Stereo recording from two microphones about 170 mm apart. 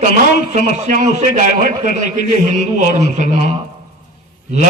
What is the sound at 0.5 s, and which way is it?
Speech, 45° right (ahead or behind).